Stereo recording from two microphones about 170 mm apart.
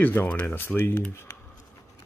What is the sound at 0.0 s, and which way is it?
Speech, 10° left (ahead or behind).